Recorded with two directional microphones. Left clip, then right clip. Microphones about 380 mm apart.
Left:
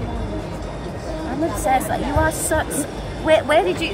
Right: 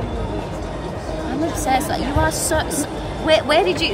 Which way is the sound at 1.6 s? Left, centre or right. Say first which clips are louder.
Left 1 dB; centre.